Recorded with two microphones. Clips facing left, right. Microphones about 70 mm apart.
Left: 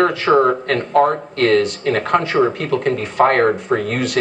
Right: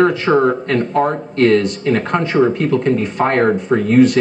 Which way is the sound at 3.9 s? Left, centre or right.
Centre.